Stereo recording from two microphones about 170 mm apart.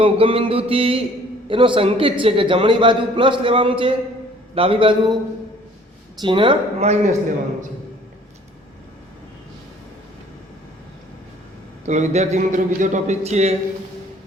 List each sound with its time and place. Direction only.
0.0 s a man's voice: 30° right (ahead or behind)
6.2 s speech: 30° right (ahead or behind)
11.9 s a man's voice: 45° right (ahead or behind)